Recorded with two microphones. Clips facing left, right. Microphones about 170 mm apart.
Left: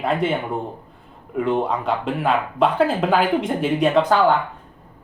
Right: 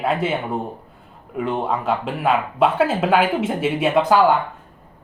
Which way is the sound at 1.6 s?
Centre (ahead or behind).